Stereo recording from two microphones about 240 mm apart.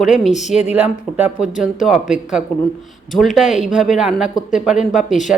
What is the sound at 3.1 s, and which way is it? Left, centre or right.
Speech, centre.